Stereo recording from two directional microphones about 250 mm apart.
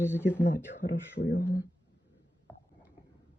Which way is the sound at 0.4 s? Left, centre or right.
Left.